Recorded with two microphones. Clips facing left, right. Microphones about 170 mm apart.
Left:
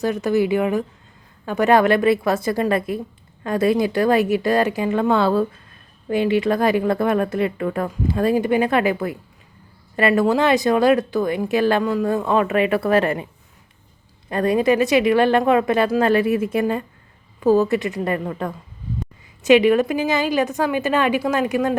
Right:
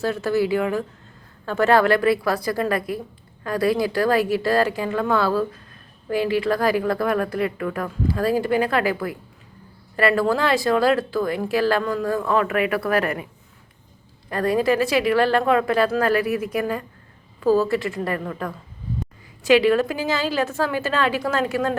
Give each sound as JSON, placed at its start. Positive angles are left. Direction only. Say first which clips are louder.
{"t": 0.0, "sound": "a woman's voice", "louder": "left 2 dB", "side_deg": 15}
{"t": 14.3, "sound": "a woman's voice", "louder": "left 2 dB", "side_deg": 20}